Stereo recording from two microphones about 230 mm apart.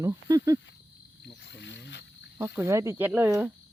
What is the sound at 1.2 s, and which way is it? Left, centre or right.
Cricket, left.